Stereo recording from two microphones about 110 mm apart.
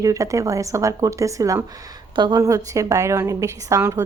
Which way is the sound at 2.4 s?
30° right (ahead or behind).